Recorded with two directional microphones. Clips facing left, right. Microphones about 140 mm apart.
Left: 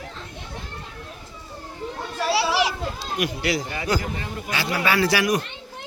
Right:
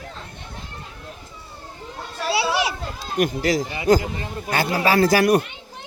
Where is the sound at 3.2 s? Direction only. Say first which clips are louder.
Right 5 dB; 40° right (ahead or behind).